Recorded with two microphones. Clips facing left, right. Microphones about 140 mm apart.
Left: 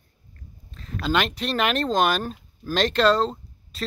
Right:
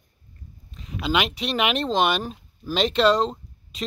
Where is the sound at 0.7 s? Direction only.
5° right (ahead or behind).